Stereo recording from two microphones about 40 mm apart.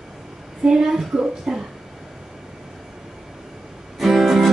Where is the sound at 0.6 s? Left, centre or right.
Centre.